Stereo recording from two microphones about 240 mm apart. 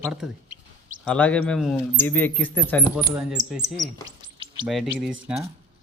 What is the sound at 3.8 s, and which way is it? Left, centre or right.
Insect, centre.